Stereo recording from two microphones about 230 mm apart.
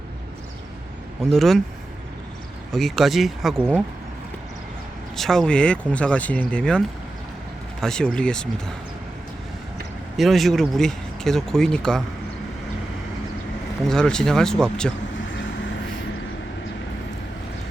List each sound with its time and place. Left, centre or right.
1.3 s speech: centre
2.7 s speech: centre
5.1 s speech: centre
10.2 s speech: centre
13.8 s speech: centre